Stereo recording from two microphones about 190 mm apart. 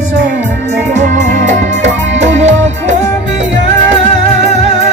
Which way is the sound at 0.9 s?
40° right (ahead or behind).